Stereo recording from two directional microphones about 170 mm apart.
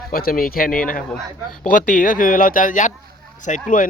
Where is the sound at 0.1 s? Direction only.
60° left (ahead or behind).